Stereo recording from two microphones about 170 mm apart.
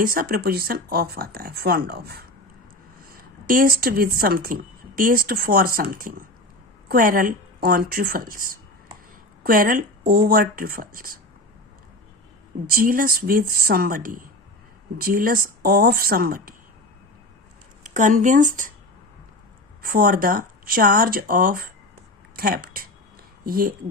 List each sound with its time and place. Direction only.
0.0 s speech: 55° right (ahead or behind)
12.6 s speech: 55° right (ahead or behind)
17.8 s speech: 50° right (ahead or behind)
19.8 s speech: 55° right (ahead or behind)